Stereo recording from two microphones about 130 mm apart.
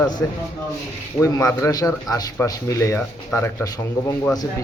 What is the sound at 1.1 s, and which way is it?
A man's voice, 20° left (ahead or behind).